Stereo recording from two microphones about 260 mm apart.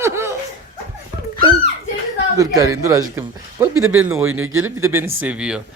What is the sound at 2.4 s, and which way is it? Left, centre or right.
Speech, centre.